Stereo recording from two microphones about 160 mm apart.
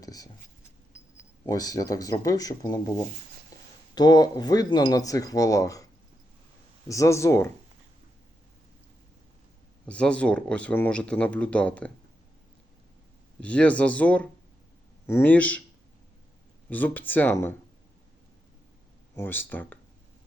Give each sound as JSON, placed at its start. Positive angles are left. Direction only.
{"t": 0.0, "sound": "a sound", "side_deg": 20}
{"t": 1.1, "sound": "speech", "side_deg": 25}
{"t": 3.9, "sound": "speech", "side_deg": 25}
{"t": 9.8, "sound": "speech", "side_deg": 5}
{"t": 13.4, "sound": "speech", "side_deg": 10}
{"t": 16.6, "sound": "speech", "side_deg": 10}
{"t": 19.1, "sound": "speech", "side_deg": 15}